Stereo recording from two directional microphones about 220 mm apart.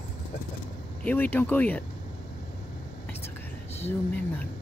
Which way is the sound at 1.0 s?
10° left (ahead or behind).